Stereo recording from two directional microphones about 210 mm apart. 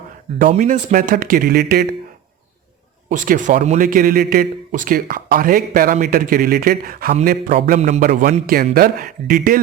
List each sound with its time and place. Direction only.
0.3 s a man's voice: 35° right (ahead or behind)
3.1 s a man's voice: 40° right (ahead or behind)